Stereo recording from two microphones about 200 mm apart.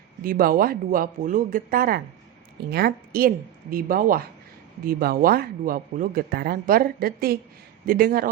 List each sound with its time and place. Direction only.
0.2 s speech: 45° right (ahead or behind)